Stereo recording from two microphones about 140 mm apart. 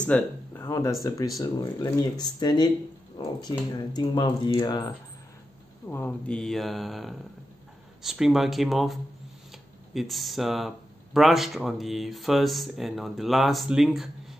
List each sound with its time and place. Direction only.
0.0 s speech: 15° left (ahead or behind)
5.9 s speech: 15° left (ahead or behind); by 14.1 s 5° right (ahead or behind)